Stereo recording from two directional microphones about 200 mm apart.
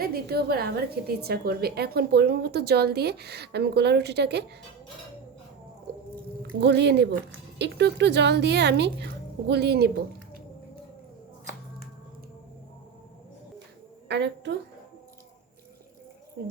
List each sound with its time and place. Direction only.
0.0 s a woman's voice: 50° right (ahead or behind)
6.6 s a woman's voice: 60° right (ahead or behind)
14.1 s a woman's voice: 60° right (ahead or behind)